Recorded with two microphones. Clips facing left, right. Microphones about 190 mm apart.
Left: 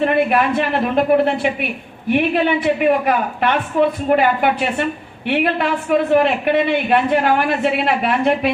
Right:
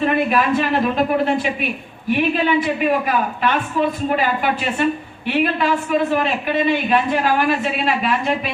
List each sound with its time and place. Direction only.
0.0 s a woman's voice: 60° left (ahead or behind)
2.0 s a woman's voice: 60° left (ahead or behind)